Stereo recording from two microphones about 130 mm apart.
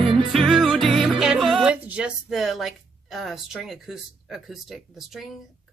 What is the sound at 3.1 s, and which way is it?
Speech, centre (ahead or behind).